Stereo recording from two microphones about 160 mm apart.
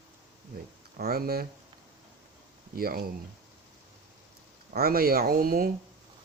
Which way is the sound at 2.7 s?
70° right (ahead or behind).